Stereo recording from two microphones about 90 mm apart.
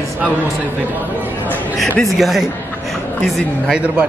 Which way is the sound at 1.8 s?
Centre (ahead or behind).